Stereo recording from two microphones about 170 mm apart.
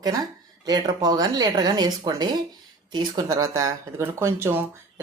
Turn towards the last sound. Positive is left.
turn(degrees=-15)  # may be behind; listen again after turning